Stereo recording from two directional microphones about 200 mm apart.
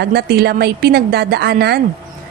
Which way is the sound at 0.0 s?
55° right (ahead or behind).